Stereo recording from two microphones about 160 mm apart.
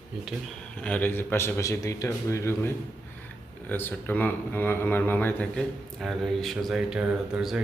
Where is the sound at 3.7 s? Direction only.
10° left (ahead or behind).